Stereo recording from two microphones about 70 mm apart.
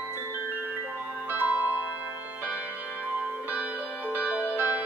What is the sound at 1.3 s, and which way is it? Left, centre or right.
Music, right.